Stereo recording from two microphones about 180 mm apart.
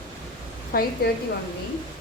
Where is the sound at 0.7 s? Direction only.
60° left (ahead or behind).